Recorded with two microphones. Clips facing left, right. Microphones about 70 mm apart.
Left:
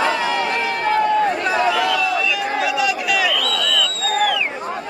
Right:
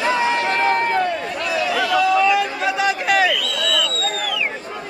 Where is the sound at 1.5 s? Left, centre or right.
Left.